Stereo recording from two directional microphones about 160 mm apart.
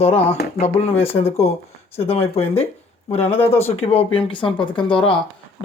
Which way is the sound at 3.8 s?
35° left (ahead or behind).